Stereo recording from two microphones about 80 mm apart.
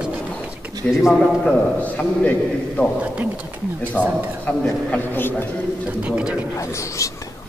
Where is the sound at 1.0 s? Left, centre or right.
Centre.